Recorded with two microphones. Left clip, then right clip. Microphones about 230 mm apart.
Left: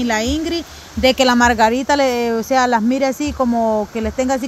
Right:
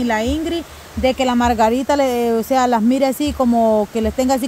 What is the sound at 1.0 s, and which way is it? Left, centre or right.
Speech, centre.